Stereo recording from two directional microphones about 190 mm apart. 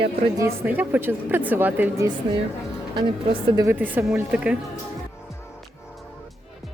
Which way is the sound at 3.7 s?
10° right (ahead or behind).